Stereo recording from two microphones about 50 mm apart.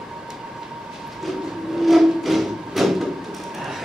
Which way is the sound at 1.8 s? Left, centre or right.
Centre.